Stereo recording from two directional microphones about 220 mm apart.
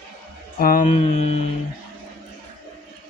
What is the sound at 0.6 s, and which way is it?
Mantra, 35° left (ahead or behind).